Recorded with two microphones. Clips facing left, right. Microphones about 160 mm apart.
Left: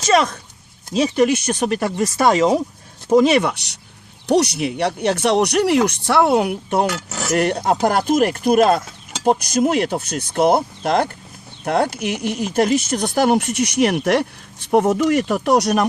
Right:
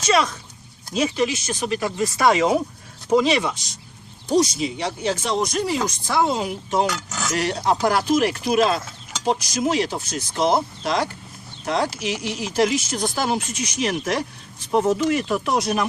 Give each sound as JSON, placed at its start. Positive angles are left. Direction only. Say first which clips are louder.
{"t": 0.0, "sound": "speech", "louder": "left 4 dB", "side_deg": 50}
{"t": 3.1, "sound": "speech", "louder": "left 5 dB", "side_deg": 50}